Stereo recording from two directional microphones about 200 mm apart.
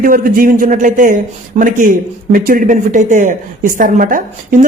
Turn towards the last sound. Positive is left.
turn(degrees=-40)  # may be behind; listen again after turning